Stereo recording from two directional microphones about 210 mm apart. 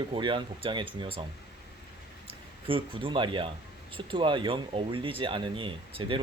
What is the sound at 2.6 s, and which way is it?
Speech, 25° right (ahead or behind).